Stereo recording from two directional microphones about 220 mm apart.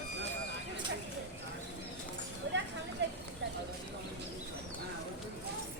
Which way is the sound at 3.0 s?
55° right (ahead or behind).